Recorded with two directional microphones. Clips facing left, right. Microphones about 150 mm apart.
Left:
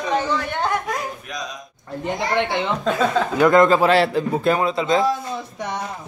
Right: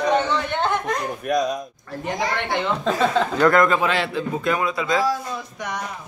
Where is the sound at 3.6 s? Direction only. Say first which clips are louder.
Left 5 dB; 35° left (ahead or behind).